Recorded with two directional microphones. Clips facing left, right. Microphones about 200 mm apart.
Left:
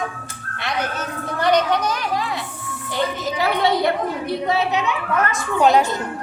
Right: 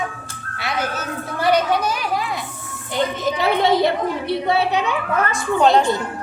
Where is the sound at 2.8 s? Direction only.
20° right (ahead or behind).